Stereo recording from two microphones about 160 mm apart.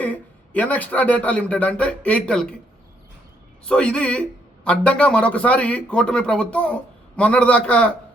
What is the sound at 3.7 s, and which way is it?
A man's voice, 5° left (ahead or behind).